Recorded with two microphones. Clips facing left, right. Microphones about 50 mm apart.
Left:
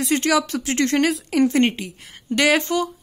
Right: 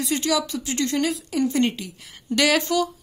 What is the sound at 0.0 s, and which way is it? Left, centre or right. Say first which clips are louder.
A woman's voice: left 4 dB; left.